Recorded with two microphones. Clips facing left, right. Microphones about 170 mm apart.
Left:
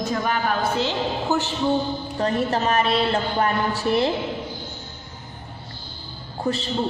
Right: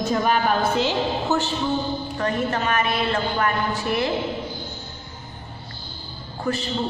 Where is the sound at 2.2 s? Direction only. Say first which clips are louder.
Left 2 dB; 30° left (ahead or behind).